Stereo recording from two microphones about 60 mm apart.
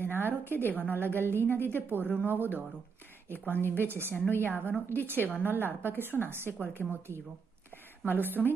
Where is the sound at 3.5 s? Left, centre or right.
Left.